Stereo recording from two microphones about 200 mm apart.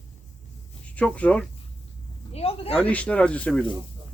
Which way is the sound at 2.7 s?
5° left (ahead or behind).